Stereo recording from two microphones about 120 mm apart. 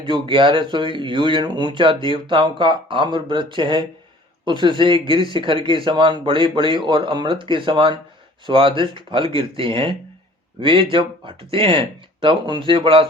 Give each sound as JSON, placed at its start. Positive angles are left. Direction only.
{"t": 0.1, "sound": "speech", "side_deg": -45}